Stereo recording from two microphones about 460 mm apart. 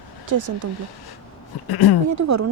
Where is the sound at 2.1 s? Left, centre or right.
Right.